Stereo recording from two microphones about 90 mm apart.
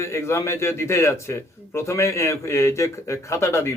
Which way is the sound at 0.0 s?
30° left (ahead or behind).